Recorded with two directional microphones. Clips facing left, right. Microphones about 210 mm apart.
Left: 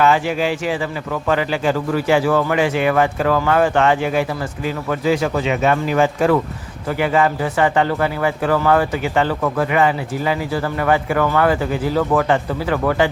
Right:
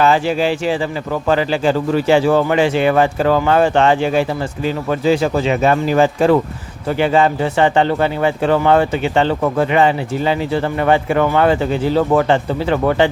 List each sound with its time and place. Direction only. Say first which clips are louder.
0.0 s speech: right 2 dB; 30° right (ahead or behind)